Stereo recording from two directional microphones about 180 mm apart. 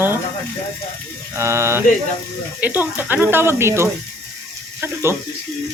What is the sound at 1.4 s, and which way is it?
Speech, 15° right (ahead or behind).